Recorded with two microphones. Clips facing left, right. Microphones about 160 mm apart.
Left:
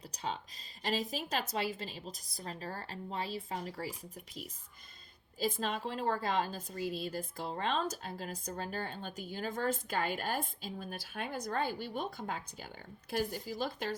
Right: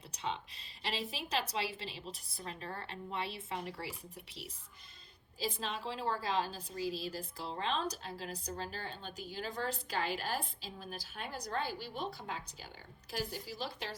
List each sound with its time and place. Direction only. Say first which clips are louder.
0.1 s a sound: even; 40° left (ahead or behind)
0.8 s a woman's voice: left 5 dB; 45° left (ahead or behind)
5.4 s a woman's voice: left 4 dB; 50° left (ahead or behind)